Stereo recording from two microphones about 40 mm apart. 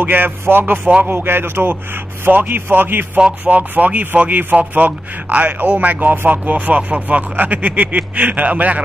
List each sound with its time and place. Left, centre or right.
0.0 s a man's voice: right
2.2 s a man's voice: right
3.4 s speech: right
7.3 s speech: right